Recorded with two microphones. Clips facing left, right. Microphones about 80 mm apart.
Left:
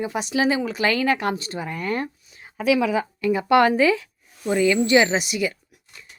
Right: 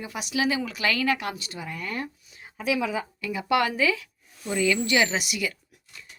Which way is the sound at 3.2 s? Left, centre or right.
Left.